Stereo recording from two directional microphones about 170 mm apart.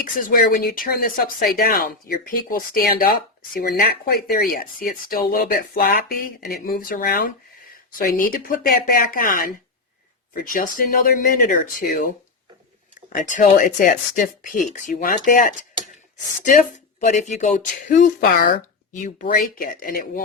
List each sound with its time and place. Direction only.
0.0 s speech: 55° left (ahead or behind)
13.1 s speech: 55° left (ahead or behind)
17.0 s speech: 45° left (ahead or behind)